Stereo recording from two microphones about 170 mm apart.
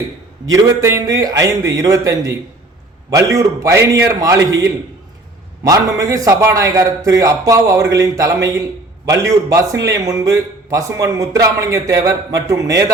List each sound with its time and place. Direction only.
0.5 s a man's voice: 20° right (ahead or behind)